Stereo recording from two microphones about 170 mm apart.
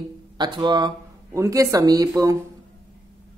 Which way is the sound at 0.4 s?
25° right (ahead or behind).